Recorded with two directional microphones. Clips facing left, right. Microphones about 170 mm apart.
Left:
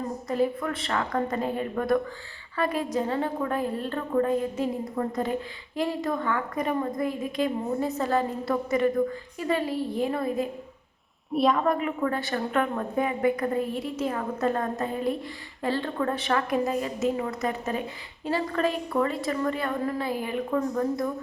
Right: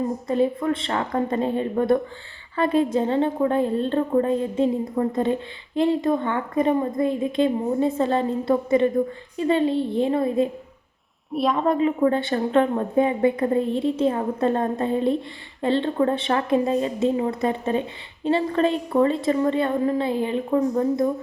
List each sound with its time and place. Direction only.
0.3 s a woman's voice: 25° right (ahead or behind)
11.5 s a woman's voice: 25° right (ahead or behind)